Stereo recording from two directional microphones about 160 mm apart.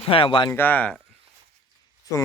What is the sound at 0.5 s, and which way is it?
Speech, 10° left (ahead or behind).